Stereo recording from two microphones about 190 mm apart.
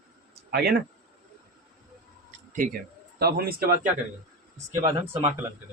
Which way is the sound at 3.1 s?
55° right (ahead or behind).